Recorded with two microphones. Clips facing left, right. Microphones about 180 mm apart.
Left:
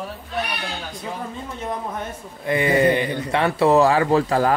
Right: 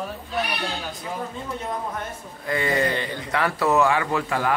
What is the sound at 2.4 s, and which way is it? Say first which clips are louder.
Speech: left 6 dB; 20° left (ahead or behind).